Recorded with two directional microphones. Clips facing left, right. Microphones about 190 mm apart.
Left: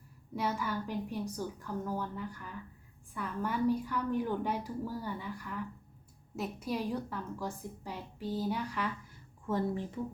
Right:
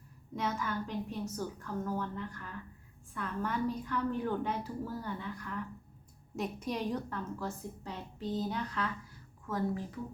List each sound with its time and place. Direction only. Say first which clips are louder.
0.3 s a woman's voice: left 1 dB; 10° left (ahead or behind)
9.5 s speech: left 2 dB; 25° left (ahead or behind)